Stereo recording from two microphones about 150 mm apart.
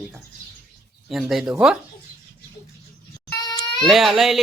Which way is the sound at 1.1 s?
Centre (ahead or behind).